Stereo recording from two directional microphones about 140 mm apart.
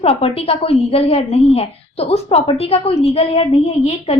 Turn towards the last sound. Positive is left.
turn(degrees=50)  # may be behind; listen again after turning